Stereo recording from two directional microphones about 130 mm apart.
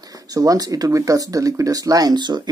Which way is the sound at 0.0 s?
30° right (ahead or behind).